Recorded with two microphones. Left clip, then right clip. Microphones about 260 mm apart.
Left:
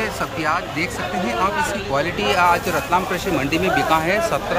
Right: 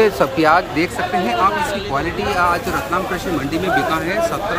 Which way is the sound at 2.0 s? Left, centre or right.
Centre.